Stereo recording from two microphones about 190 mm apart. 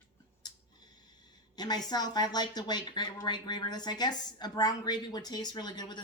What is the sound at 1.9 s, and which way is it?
Speech, 20° left (ahead or behind).